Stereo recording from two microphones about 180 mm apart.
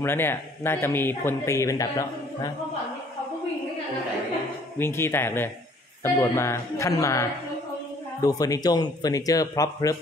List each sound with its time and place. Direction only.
0.0 s speech: 10° left (ahead or behind)
4.7 s speech: 15° left (ahead or behind)